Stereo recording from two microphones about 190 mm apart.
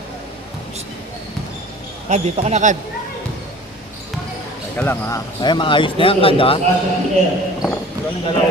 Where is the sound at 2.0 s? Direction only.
35° right (ahead or behind).